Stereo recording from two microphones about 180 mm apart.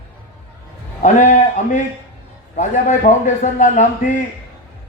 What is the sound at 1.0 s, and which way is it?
A man's voice, 45° left (ahead or behind).